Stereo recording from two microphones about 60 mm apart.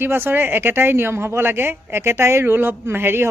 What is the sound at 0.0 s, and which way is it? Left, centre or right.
Speech, right.